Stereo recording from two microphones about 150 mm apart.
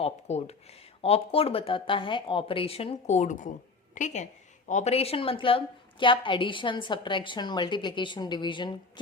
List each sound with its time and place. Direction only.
0.0 s a woman's voice: 45° left (ahead or behind)